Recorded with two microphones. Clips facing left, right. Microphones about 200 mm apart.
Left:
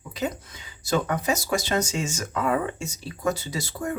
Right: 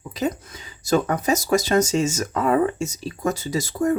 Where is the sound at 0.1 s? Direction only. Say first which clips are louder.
Right 4 dB; 40° right (ahead or behind).